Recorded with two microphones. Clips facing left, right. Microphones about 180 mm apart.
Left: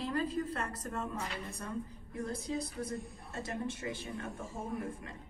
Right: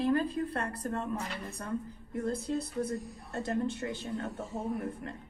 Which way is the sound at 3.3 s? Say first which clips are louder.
Right 6 dB; 60° right (ahead or behind).